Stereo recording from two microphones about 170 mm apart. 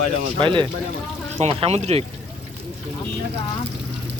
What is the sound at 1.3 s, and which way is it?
Speech, 40° right (ahead or behind).